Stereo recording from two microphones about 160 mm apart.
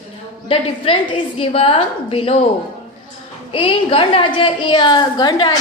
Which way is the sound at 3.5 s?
30° left (ahead or behind).